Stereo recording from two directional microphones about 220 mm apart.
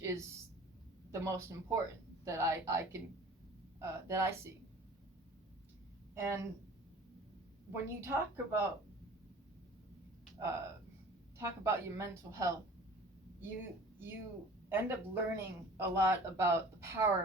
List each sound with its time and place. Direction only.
0.0 s a sound: 15° right (ahead or behind)
1.1 s speech: 15° right (ahead or behind)
6.1 s speech: 10° right (ahead or behind)
7.7 s speech: 10° right (ahead or behind)
11.3 s a woman's voice: 15° right (ahead or behind)